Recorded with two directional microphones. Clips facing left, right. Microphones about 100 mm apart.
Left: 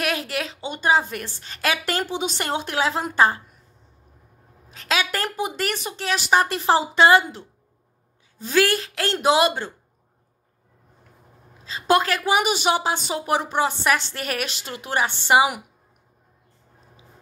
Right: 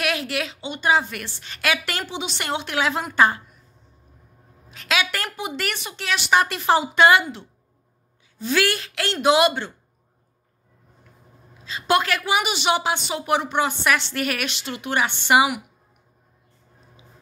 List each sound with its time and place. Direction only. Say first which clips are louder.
0.0 s a woman's voice: even; 40° left (ahead or behind)
4.6 s a woman's voice: even; 35° left (ahead or behind)
11.6 s a woman's voice: left 1 dB; 35° left (ahead or behind)